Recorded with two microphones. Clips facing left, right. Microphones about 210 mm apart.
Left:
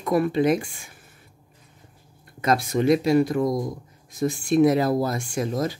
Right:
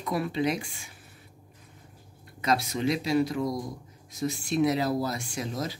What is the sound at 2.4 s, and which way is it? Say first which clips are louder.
Speech: left 5 dB; 50° left (ahead or behind).